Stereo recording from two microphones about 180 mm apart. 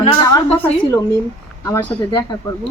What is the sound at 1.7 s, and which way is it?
Speech, 5° left (ahead or behind).